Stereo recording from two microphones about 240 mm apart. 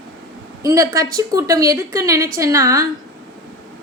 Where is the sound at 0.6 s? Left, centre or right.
Centre.